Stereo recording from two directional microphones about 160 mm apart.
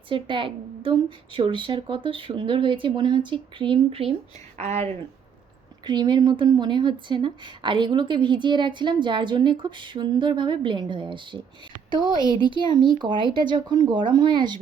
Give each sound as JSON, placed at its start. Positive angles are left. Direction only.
{"t": 0.1, "sound": "a woman's voice", "side_deg": -30}
{"t": 5.8, "sound": "speech", "side_deg": -30}